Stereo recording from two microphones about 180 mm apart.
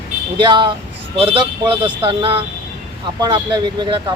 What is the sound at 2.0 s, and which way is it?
Speech, 30° right (ahead or behind).